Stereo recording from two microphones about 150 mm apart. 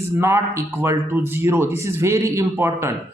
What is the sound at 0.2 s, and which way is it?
A man's voice, 20° right (ahead or behind).